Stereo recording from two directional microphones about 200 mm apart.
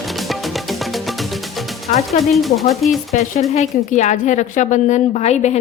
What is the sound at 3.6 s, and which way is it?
A woman's voice, 35° left (ahead or behind).